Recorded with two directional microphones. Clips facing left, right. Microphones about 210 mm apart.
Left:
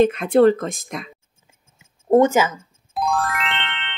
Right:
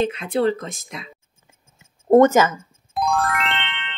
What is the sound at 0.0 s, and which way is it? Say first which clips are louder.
Speech: left 6 dB; 50° left (ahead or behind).